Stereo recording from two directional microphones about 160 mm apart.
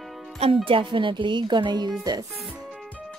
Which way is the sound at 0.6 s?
30° right (ahead or behind).